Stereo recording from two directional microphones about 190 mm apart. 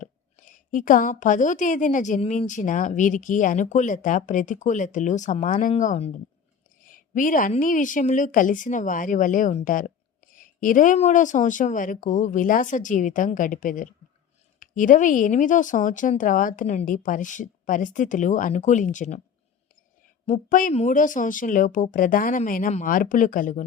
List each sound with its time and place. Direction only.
0.0 s a woman's voice: 45° left (ahead or behind)
20.2 s a woman's voice: 40° left (ahead or behind)